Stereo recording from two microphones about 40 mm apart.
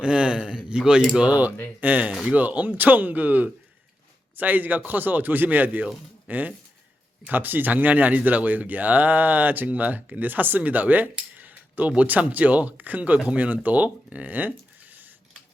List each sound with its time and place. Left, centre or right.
0.0 s speech: right
1.3 s speech: right
11.3 s a sound: right
12.0 s speech: right